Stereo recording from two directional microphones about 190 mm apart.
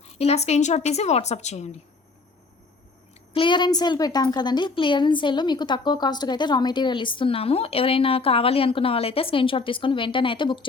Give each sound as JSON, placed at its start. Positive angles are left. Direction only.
{"t": 0.0, "sound": "a woman's voice", "side_deg": 35}
{"t": 3.3, "sound": "a woman's voice", "side_deg": 25}